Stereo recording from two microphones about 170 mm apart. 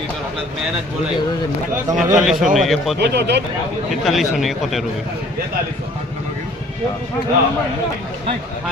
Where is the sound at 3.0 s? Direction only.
80° right.